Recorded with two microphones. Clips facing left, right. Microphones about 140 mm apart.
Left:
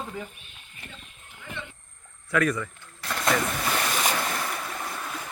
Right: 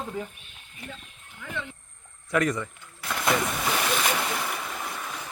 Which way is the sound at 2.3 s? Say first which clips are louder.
Even; 20° right (ahead or behind).